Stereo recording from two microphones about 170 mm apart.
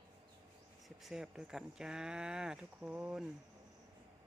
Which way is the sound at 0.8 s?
Centre (ahead or behind).